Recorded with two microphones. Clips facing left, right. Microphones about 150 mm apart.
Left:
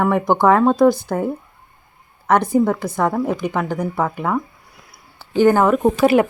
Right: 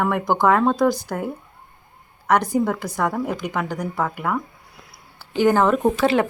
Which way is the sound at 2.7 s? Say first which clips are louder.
Left 4 dB; 15° left (ahead or behind).